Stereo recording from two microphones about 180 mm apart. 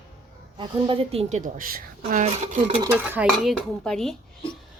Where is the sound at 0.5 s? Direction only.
25° right (ahead or behind).